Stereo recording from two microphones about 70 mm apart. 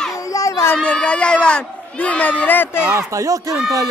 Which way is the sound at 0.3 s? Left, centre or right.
Left.